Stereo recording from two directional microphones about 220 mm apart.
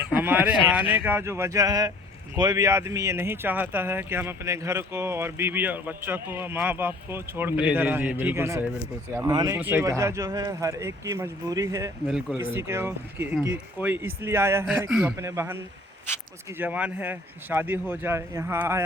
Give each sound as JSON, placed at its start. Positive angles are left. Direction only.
{"t": 0.0, "sound": "a sound", "side_deg": -10}
{"t": 0.7, "sound": "speech", "side_deg": -5}
{"t": 12.0, "sound": "a man's voice", "side_deg": -5}